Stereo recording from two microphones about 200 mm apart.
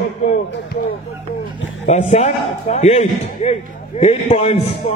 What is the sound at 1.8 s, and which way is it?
A man's voice, 35° left (ahead or behind).